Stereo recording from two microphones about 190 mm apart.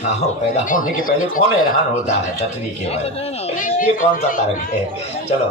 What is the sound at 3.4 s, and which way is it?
Speech, 40° left (ahead or behind).